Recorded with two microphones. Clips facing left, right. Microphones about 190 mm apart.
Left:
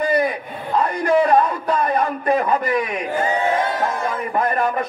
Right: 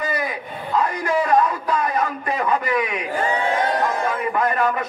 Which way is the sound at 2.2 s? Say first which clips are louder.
Left 3 dB; 35° left (ahead or behind).